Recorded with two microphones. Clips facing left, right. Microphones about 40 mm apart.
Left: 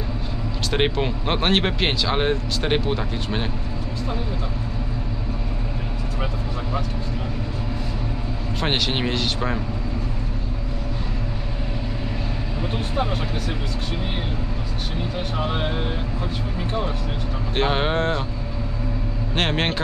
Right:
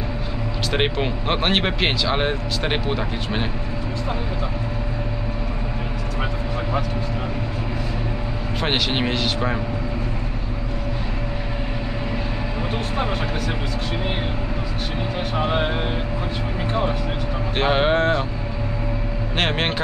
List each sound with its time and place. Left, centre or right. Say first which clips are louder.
0.7 s speech: even; centre
8.5 s speech: right 1 dB; centre
15.3 s speech: right 4 dB; centre
17.6 s speech: right 3 dB; centre
19.3 s speech: even; centre